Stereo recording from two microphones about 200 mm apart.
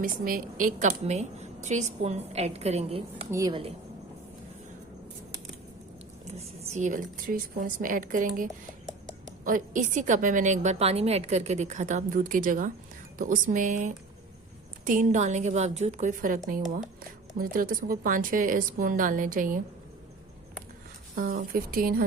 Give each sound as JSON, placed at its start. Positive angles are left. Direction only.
{"t": 0.0, "sound": "a woman's voice", "side_deg": -45}
{"t": 6.3, "sound": "a woman's voice", "side_deg": -30}
{"t": 21.2, "sound": "a woman's voice", "side_deg": -45}